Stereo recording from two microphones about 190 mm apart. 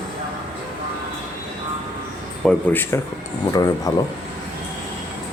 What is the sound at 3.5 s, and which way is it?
Speech, 20° left (ahead or behind).